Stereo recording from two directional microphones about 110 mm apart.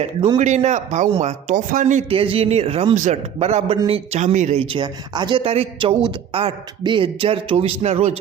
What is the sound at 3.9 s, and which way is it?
Speech, 90° right.